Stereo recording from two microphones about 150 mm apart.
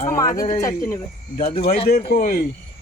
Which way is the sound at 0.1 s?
20° left (ahead or behind).